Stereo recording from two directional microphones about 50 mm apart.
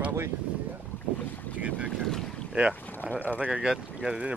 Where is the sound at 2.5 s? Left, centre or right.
Centre.